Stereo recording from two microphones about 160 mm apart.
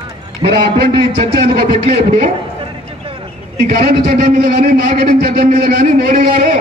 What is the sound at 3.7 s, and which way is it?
A man's voice, 75° right (ahead or behind).